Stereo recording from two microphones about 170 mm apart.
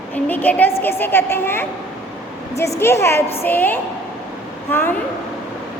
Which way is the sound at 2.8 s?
15° left (ahead or behind).